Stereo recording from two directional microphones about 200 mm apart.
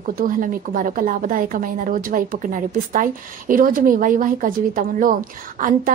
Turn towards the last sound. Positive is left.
turn(degrees=-40)  # may be behind; listen again after turning